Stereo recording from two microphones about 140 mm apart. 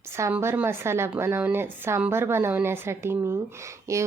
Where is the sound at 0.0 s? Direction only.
20° right (ahead or behind).